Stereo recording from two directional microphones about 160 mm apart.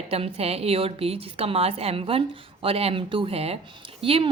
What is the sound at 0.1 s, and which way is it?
A woman's voice, 40° right (ahead or behind).